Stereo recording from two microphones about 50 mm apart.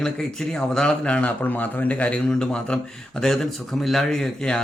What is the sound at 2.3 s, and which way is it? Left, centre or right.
Speech, centre.